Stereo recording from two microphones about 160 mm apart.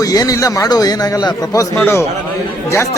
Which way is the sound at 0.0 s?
20° left (ahead or behind).